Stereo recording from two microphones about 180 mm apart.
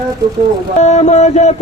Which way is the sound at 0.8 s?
40° left (ahead or behind).